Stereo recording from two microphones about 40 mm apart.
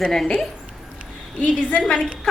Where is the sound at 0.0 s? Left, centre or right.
Centre.